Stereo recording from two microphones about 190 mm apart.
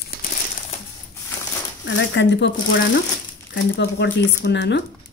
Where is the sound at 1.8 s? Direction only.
70° left (ahead or behind).